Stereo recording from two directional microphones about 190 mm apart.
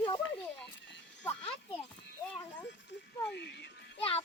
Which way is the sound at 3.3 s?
65° left (ahead or behind).